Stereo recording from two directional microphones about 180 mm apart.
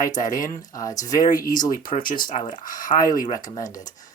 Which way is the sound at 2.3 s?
35° left (ahead or behind).